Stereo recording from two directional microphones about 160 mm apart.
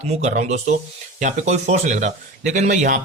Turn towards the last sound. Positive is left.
turn(degrees=-50)  # may be behind; listen again after turning